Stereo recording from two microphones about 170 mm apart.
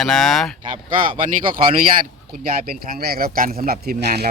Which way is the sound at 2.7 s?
60° right (ahead or behind).